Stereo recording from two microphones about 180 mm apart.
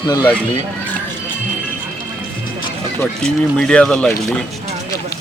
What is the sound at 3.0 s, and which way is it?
Speech, 5° left (ahead or behind).